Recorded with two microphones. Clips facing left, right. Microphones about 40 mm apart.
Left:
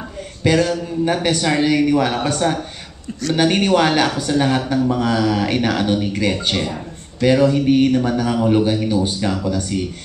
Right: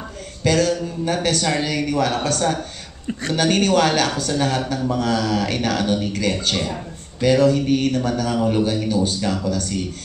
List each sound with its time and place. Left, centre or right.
0.4 s speech: centre
3.1 s a man's voice: right
3.3 s speech: centre